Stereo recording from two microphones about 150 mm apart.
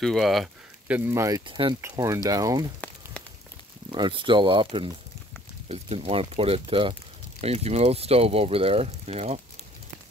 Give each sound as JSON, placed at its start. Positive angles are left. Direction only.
{"t": 0.0, "sound": "speech", "side_deg": 0}
{"t": 0.9, "sound": "speech", "side_deg": -15}
{"t": 1.4, "sound": "speech", "side_deg": -35}
{"t": 1.8, "sound": "speech", "side_deg": -20}
{"t": 3.9, "sound": "speech", "side_deg": -35}